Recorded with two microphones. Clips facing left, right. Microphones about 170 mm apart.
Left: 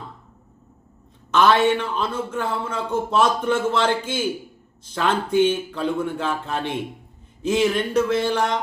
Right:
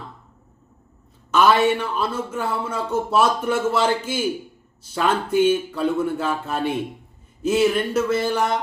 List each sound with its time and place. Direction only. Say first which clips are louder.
1.3 s a man's voice: even; 10° right (ahead or behind)